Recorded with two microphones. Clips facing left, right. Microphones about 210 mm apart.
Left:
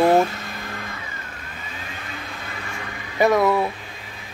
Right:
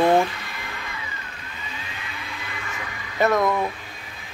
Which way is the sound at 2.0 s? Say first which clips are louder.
Left 2 dB; 45° left (ahead or behind).